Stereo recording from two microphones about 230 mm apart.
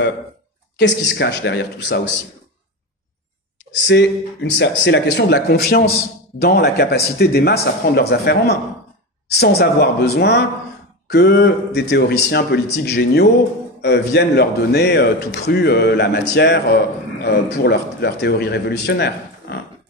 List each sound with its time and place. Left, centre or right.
0.7 s a man's voice: left
3.8 s a man's voice: left